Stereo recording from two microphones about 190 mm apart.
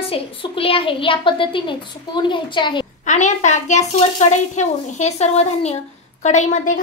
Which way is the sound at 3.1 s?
40° left (ahead or behind).